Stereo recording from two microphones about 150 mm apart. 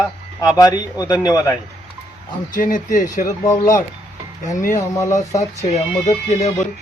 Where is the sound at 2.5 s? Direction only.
60° left (ahead or behind).